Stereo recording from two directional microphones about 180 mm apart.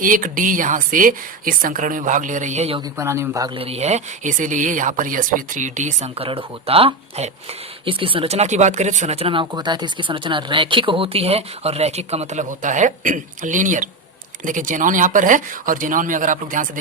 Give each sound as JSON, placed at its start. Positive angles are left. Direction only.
{"t": 0.0, "sound": "speech", "side_deg": -50}
{"t": 3.0, "sound": "speech", "side_deg": -15}